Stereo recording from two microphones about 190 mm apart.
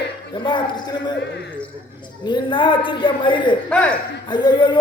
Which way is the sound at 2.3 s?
25° left (ahead or behind).